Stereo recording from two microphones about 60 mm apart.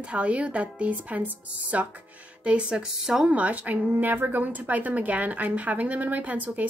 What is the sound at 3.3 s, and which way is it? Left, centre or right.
Speech, right.